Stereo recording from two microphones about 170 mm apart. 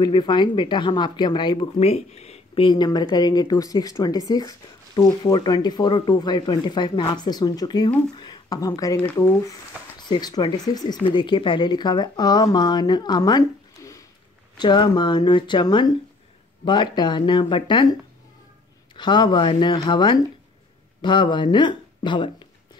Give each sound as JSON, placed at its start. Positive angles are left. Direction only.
{"t": 0.0, "sound": "speech", "side_deg": 25}
{"t": 18.9, "sound": "speech", "side_deg": 25}